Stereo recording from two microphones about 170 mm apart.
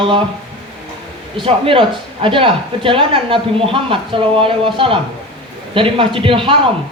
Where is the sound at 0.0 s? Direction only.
30° right (ahead or behind).